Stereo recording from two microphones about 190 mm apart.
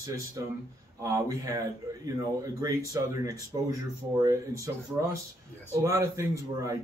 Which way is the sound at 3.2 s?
15° right (ahead or behind).